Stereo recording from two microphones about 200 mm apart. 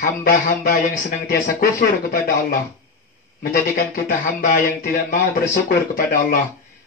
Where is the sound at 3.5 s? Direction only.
50° left (ahead or behind).